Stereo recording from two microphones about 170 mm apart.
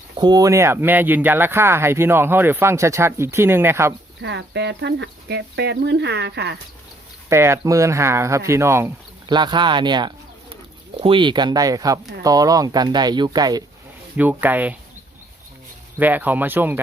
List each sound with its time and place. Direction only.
0.2 s speech: 25° right (ahead or behind)
4.2 s speech: 90° right
7.3 s speech: 15° right (ahead or behind)
9.2 s speech: 25° right (ahead or behind)
14.2 s speech: 10° right (ahead or behind)
16.0 s speech: 10° right (ahead or behind)